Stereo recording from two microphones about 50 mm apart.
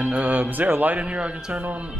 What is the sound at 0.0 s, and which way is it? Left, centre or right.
Music, right.